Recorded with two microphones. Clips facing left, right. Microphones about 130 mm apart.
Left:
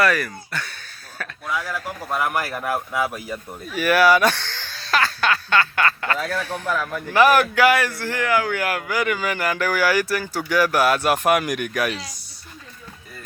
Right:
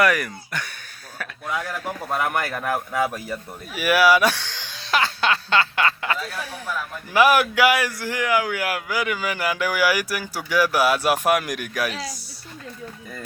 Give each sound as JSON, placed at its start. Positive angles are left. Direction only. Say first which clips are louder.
{"t": 0.0, "sound": "speech", "louder": "even", "side_deg": -15}
{"t": 1.8, "sound": "a man's voice", "louder": "even", "side_deg": 0}
{"t": 3.7, "sound": "a sound", "louder": "left 1 dB", "side_deg": -10}
{"t": 6.2, "sound": "speech", "louder": "left 6 dB", "side_deg": 90}
{"t": 7.1, "sound": "speech", "louder": "left 1 dB", "side_deg": -10}